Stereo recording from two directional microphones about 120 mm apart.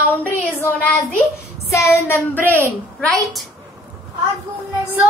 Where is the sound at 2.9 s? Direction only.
Centre (ahead or behind).